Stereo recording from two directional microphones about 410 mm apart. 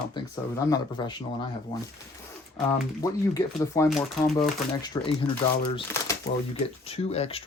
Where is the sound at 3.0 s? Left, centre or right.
Centre.